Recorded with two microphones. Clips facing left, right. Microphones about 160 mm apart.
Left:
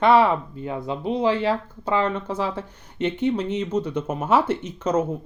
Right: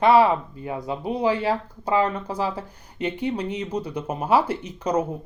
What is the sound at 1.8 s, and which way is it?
Speech, 35° right (ahead or behind).